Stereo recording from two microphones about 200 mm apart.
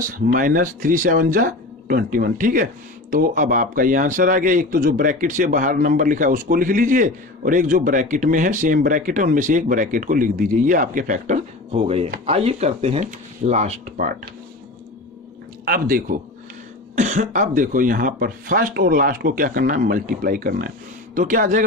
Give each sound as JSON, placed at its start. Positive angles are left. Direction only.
{"t": 0.0, "sound": "speech", "side_deg": -45}
{"t": 15.6, "sound": "speech", "side_deg": -45}